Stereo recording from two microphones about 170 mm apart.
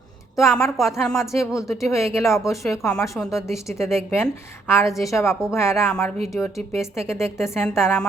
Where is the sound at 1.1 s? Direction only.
15° left (ahead or behind).